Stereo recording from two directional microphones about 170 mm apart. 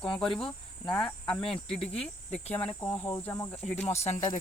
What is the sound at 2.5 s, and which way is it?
Speech, 5° left (ahead or behind).